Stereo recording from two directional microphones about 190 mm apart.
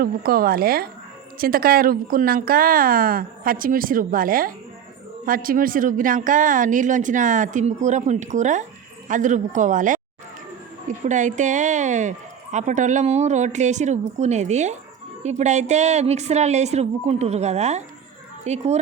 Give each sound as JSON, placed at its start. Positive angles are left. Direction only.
{"t": 0.0, "sound": "speech", "side_deg": -50}